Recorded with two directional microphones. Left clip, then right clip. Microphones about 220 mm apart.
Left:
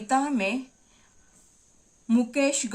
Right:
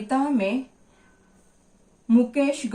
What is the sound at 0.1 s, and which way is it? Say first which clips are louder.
Speech: right 1 dB; 20° left (ahead or behind).